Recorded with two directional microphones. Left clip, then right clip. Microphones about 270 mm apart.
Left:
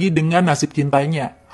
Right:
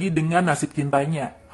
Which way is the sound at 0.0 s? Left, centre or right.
Left.